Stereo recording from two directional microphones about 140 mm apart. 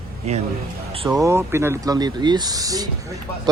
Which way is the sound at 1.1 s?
20° right (ahead or behind).